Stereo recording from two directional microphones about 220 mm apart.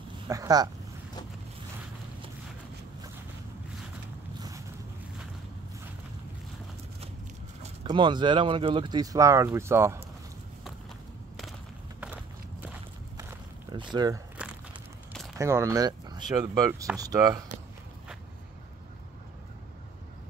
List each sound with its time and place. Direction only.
0.3 s speech: 15° right (ahead or behind)
7.8 s speech: 20° right (ahead or behind)
13.2 s walk: 20° right (ahead or behind)
13.9 s speech: 20° right (ahead or behind)
15.3 s speech: 15° right (ahead or behind)